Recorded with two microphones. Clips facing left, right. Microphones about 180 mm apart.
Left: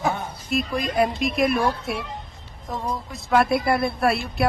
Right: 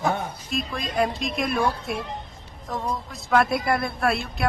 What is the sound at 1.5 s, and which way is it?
Speech, centre (ahead or behind).